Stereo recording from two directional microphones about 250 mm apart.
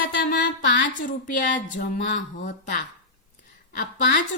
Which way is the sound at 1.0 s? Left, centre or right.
Left.